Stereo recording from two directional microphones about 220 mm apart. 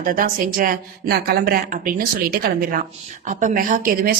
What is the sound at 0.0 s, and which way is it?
Speech, 40° right (ahead or behind).